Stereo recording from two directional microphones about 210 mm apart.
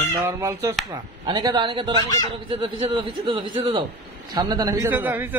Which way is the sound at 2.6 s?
25° right (ahead or behind).